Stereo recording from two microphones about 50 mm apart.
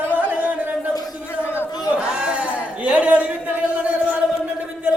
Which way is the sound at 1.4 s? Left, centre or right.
Left.